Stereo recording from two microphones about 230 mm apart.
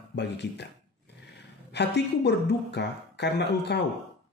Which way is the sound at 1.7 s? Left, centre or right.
Left.